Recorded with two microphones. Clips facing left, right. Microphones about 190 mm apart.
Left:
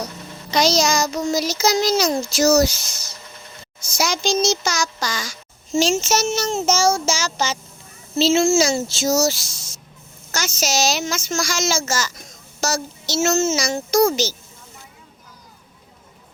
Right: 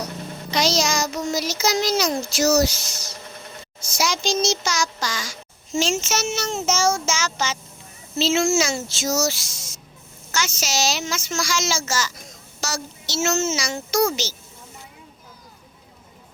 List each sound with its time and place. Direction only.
0.5 s child singing: 40° left (ahead or behind)
3.9 s a child's voice: 45° left (ahead or behind)
5.9 s child singing: 35° left (ahead or behind)
10.3 s a child's voice: 40° left (ahead or behind)
12.6 s child singing: 40° left (ahead or behind)